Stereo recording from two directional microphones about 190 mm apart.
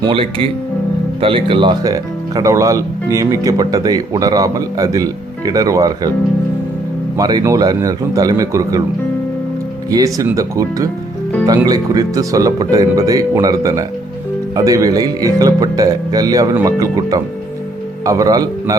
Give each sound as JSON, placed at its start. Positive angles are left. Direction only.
{"t": 0.0, "sound": "speech", "side_deg": -30}
{"t": 7.2, "sound": "speech", "side_deg": -20}
{"t": 9.9, "sound": "speech", "side_deg": -15}